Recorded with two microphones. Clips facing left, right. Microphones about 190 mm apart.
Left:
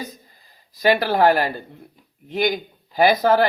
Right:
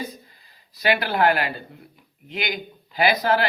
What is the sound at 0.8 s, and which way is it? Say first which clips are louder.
Speech: left 4 dB; 45° left (ahead or behind).